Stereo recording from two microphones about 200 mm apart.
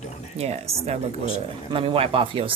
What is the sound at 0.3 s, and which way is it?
Speech, 30° right (ahead or behind).